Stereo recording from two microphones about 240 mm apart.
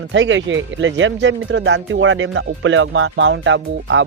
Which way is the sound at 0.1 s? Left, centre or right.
Right.